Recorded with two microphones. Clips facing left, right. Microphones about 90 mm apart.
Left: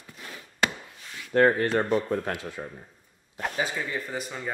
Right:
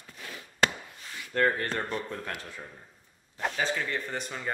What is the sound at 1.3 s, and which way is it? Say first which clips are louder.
Speech: left 6 dB; 20° left (ahead or behind).